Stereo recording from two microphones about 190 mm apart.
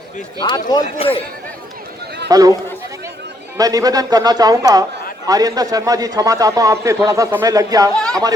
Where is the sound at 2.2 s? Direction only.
20° right (ahead or behind).